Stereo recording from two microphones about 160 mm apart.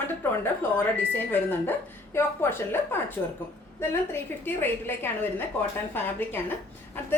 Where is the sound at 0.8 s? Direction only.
15° left (ahead or behind).